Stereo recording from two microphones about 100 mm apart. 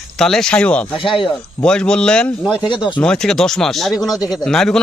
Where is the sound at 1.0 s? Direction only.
60° left (ahead or behind).